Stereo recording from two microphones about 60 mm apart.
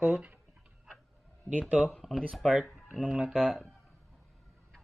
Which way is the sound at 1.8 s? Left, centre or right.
Centre.